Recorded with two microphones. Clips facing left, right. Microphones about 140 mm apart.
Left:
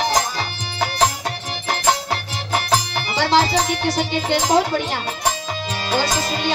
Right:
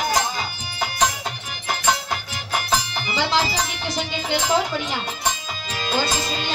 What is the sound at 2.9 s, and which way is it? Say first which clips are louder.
Music: left 4 dB; 50° left (ahead or behind).